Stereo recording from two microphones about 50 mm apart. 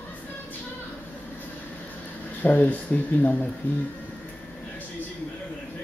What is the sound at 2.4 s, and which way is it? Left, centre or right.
Speech, left.